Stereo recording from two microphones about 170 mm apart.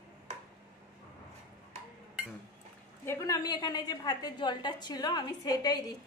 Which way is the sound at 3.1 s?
20° left (ahead or behind).